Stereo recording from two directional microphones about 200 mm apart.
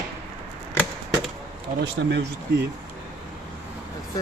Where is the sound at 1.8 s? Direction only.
60° right (ahead or behind).